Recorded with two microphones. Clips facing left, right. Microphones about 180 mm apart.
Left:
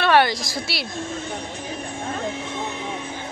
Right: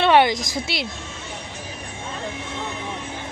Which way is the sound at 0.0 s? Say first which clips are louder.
Right 2 dB; 20° right (ahead or behind).